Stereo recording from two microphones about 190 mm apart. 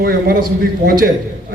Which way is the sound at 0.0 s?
55° right (ahead or behind).